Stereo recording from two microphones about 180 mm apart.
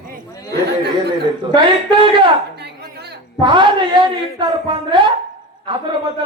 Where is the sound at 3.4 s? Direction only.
25° right (ahead or behind).